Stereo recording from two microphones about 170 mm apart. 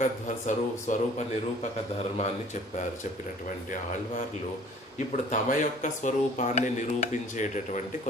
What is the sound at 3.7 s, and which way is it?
Speech, 50° left (ahead or behind).